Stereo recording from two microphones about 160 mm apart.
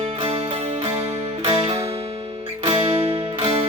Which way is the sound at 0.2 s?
35° right (ahead or behind).